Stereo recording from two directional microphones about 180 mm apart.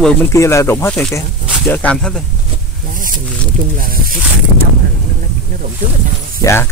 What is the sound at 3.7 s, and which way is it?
Speech, 50° right (ahead or behind).